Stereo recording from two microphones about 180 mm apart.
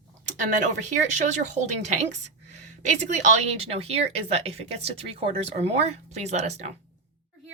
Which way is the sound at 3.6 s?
35° right (ahead or behind).